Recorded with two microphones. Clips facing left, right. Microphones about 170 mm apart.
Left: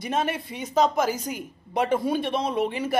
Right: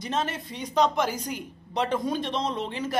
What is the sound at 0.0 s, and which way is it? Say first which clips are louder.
A man's voice: left 3 dB; 10° left (ahead or behind).